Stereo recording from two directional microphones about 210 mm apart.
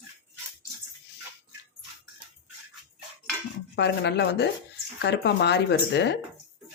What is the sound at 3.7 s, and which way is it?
Speech, 55° left (ahead or behind).